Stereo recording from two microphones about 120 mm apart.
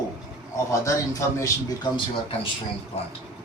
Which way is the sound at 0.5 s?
25° left (ahead or behind).